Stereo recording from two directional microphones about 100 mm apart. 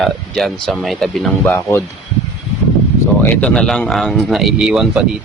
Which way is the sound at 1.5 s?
20° left (ahead or behind).